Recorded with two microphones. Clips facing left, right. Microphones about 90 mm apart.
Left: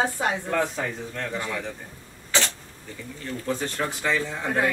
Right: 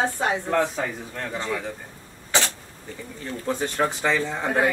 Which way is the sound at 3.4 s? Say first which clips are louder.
Right 4 dB; 25° right (ahead or behind).